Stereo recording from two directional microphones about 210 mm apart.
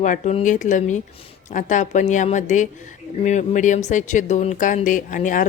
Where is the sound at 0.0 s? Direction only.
35° left (ahead or behind).